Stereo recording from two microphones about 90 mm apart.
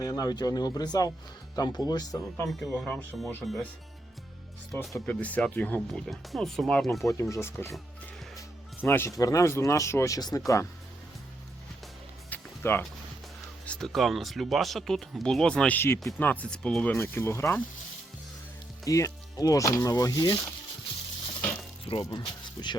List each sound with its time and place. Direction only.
0.0 s speech: 45° left (ahead or behind)
2.5 s speech: centre (ahead or behind)
4.7 s speech: centre (ahead or behind)
5.0 s speech: 15° left (ahead or behind)
5.9 s speech: centre (ahead or behind)
7.0 s speech: 35° left (ahead or behind)
8.8 s speech: 25° left (ahead or behind)
9.1 s speech: 40° left (ahead or behind)
12.3 s music: 25° left (ahead or behind)
13.7 s speech: 5° left (ahead or behind)
17.0 s speech: 30° left (ahead or behind)
18.9 s speech: 35° left (ahead or behind)
21.9 s speech: 90° left
22.6 s speech: 45° left (ahead or behind)